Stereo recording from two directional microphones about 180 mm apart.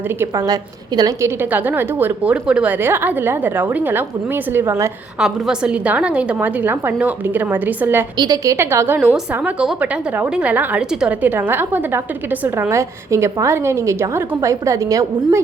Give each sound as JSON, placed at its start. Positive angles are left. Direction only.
{"t": 0.2, "sound": "a woman's voice", "side_deg": -20}